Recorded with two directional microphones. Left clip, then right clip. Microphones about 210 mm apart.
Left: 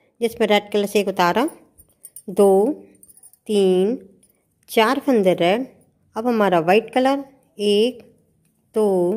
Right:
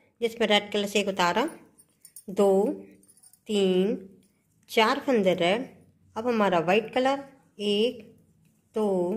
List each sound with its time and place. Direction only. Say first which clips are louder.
0.0 s a woman's voice: left 6 dB; 45° left (ahead or behind)